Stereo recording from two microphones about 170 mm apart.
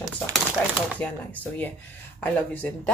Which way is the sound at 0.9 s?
10° left (ahead or behind).